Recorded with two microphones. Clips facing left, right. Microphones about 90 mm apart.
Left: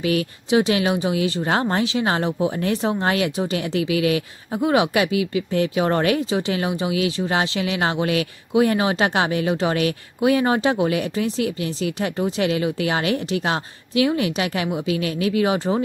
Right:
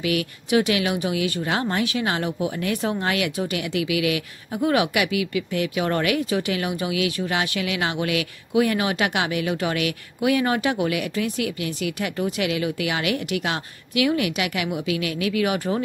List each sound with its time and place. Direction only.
0.0 s speech: 30° left (ahead or behind)